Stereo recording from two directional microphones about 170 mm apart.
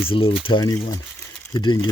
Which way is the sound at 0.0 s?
30° left (ahead or behind).